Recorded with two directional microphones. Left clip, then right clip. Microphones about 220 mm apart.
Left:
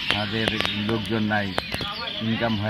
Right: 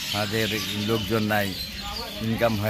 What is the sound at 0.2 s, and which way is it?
Speech, 25° right (ahead or behind).